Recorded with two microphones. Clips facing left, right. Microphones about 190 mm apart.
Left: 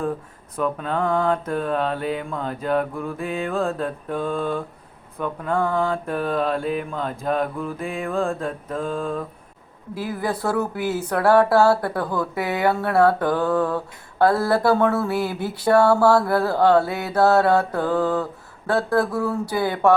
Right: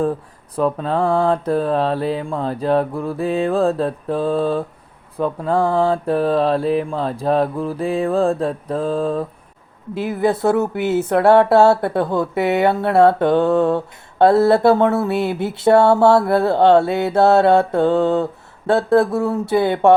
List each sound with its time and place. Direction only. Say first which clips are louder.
0.5 s mantra: right 5 dB; 35° right (ahead or behind)
9.9 s speech: right 7 dB; 25° right (ahead or behind)